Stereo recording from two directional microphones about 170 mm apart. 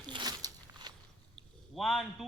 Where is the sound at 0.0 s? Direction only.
25° right (ahead or behind).